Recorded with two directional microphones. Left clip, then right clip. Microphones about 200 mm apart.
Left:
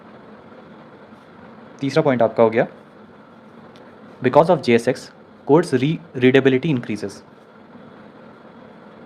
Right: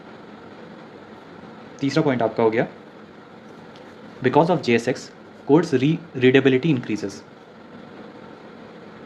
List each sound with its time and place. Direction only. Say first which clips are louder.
1.8 s speech: left 4 dB; 25° left (ahead or behind)
4.2 s speech: left 4 dB; 25° left (ahead or behind)